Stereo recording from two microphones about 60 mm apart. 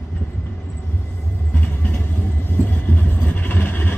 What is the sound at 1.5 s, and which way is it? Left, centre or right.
Vehicle, left.